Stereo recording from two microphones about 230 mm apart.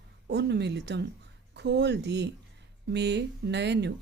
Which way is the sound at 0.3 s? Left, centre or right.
Right.